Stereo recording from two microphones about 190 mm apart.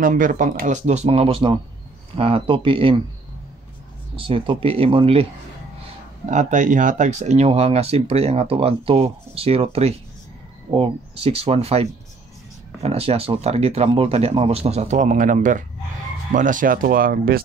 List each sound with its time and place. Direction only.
0.0 s speech: 45° right (ahead or behind); by 3.0 s 30° right (ahead or behind)
4.2 s speech: 30° right (ahead or behind)
6.2 s speech: 40° right (ahead or behind)